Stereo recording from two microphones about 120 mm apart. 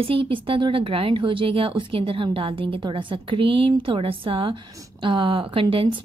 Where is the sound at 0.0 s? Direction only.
50° right (ahead or behind).